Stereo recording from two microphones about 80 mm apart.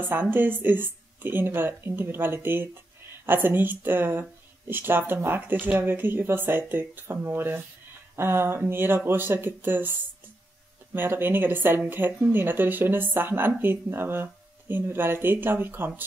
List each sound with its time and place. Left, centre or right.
0.0 s speech: right